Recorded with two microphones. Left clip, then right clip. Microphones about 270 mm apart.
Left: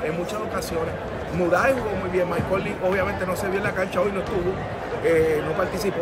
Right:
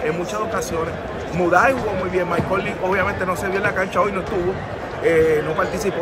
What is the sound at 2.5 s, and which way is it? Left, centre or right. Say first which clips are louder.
Speech: right 1 dB; centre.